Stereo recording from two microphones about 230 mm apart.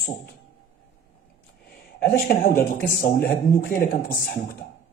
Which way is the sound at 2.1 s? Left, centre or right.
Left.